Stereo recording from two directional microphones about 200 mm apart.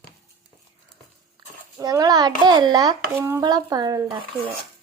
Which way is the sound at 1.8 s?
20° right (ahead or behind).